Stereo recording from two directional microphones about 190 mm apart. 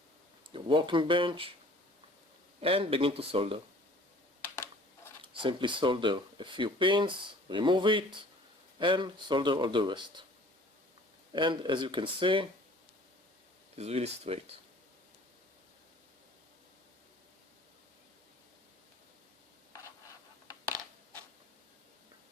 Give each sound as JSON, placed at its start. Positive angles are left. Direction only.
{"t": 0.5, "sound": "speech", "side_deg": -25}
{"t": 2.6, "sound": "speech", "side_deg": -30}
{"t": 4.4, "sound": "a sound", "side_deg": 10}
{"t": 5.2, "sound": "speech", "side_deg": -25}
{"t": 11.3, "sound": "speech", "side_deg": -25}
{"t": 13.7, "sound": "speech", "side_deg": -35}